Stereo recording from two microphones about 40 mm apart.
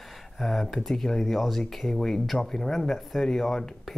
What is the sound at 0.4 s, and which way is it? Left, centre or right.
Speech, centre.